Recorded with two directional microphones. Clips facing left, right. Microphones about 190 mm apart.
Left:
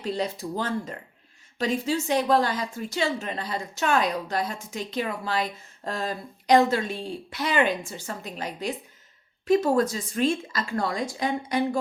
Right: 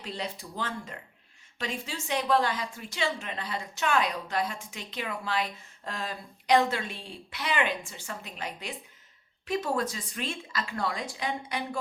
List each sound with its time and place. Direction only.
0.0 s a woman's voice: 40° left (ahead or behind)